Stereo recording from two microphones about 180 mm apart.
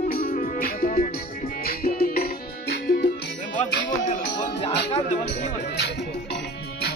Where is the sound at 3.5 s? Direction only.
45° left (ahead or behind).